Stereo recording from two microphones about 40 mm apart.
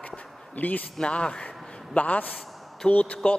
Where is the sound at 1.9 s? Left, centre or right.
Left.